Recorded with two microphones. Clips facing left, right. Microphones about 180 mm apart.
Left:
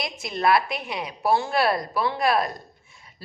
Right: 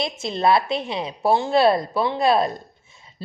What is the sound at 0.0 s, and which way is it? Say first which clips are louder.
A woman's voice: right 3 dB; 25° right (ahead or behind).